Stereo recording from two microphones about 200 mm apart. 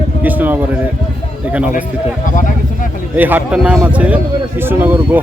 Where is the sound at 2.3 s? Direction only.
40° left (ahead or behind).